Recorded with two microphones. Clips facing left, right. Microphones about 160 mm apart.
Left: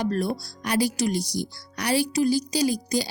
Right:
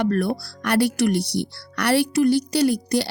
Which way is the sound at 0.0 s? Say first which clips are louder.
Right 4 dB; 60° right (ahead or behind).